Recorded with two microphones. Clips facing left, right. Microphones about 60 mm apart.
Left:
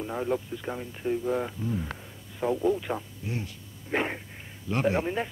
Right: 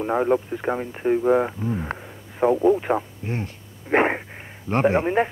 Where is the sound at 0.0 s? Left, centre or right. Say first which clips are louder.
Right 9 dB; right.